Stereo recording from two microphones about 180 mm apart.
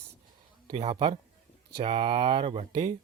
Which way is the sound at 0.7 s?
35° right (ahead or behind).